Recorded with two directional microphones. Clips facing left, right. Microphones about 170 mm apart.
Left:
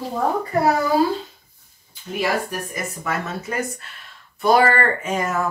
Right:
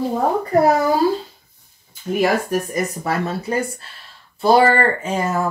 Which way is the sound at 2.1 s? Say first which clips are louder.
Right 5 dB; 45° right (ahead or behind).